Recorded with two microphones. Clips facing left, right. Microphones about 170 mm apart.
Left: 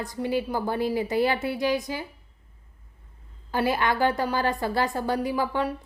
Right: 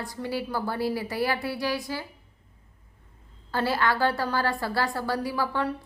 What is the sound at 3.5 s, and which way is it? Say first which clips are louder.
A woman's voice: left 1 dB; 15° left (ahead or behind).